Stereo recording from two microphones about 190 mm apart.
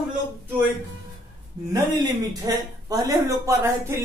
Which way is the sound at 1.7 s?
20° right (ahead or behind).